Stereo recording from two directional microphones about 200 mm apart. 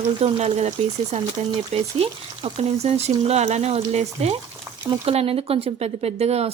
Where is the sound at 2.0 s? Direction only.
30° right (ahead or behind).